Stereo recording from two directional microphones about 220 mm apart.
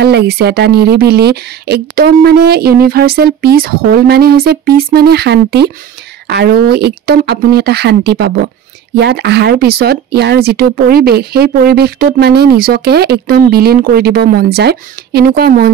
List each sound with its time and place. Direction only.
0.0 s speech: 50° right (ahead or behind)